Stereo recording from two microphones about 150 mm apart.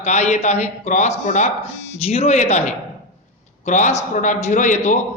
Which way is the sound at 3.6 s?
55° left (ahead or behind).